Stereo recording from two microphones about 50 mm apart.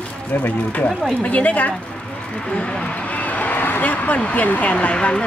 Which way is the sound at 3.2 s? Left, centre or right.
Left.